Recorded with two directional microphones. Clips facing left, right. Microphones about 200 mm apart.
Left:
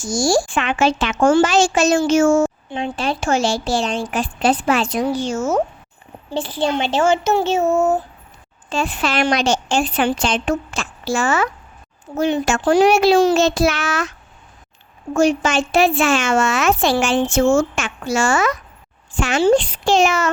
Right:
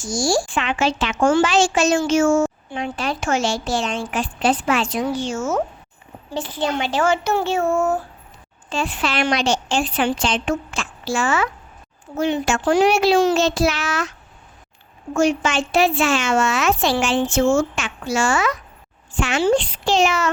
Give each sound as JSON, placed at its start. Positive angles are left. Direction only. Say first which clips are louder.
{"t": 0.0, "sound": "a woman's voice", "louder": "left 3 dB", "side_deg": 45}
{"t": 2.6, "sound": "a woman's voice", "louder": "left 3 dB", "side_deg": 25}
{"t": 8.7, "sound": "speech", "louder": "left 2 dB", "side_deg": 45}
{"t": 15.1, "sound": "a woman's voice", "louder": "left 2 dB", "side_deg": 35}